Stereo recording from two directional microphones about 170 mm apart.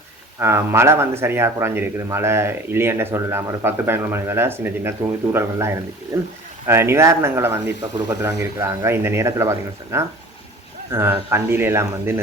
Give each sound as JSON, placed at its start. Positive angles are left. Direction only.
{"t": 0.3, "sound": "speech", "side_deg": -15}